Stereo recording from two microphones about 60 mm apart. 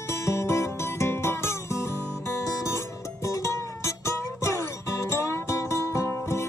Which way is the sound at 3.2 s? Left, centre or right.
Left.